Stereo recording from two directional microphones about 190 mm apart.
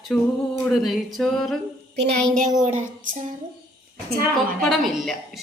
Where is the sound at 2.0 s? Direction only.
45° right (ahead or behind).